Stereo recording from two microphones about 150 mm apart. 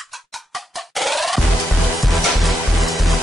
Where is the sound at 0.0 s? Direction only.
Centre (ahead or behind).